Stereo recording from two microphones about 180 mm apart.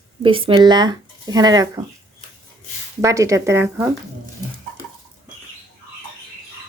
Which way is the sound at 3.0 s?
15° right (ahead or behind).